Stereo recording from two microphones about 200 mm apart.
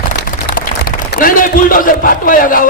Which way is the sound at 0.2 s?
45° left (ahead or behind).